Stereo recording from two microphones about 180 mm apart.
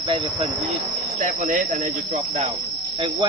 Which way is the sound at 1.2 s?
45° right (ahead or behind).